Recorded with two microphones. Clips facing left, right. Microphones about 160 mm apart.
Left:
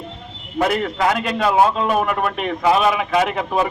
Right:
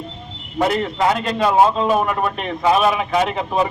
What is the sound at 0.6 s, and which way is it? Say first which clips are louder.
A man's voice: right 1 dB; centre (ahead or behind).